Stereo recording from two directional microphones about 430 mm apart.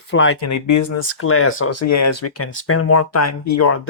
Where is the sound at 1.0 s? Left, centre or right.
Left.